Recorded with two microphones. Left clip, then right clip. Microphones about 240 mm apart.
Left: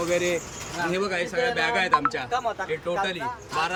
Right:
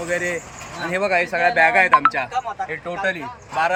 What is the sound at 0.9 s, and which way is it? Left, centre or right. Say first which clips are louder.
A man's voice: right 9 dB; centre.